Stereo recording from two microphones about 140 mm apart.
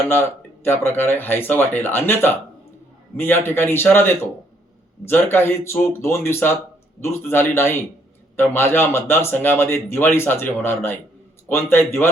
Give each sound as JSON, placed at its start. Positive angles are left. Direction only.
{"t": 0.1, "sound": "a man's voice", "side_deg": 15}